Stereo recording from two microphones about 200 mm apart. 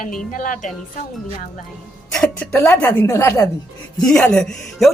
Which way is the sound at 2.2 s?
5° left (ahead or behind).